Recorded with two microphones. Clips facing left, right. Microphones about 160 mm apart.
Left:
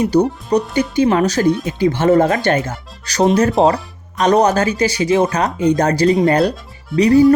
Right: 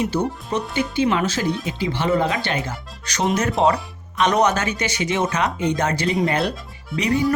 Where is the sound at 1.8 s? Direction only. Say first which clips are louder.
Left 8 dB; 45° left (ahead or behind).